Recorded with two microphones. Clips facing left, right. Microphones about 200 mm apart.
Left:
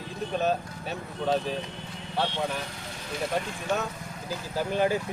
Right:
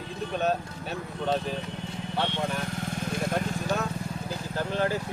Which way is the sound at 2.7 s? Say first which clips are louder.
Right 6 dB; 50° right (ahead or behind).